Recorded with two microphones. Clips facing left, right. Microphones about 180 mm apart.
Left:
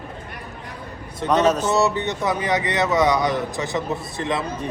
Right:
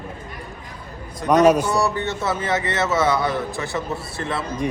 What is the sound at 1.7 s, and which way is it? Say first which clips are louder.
A man's voice: left 1 dB; 20° left (ahead or behind).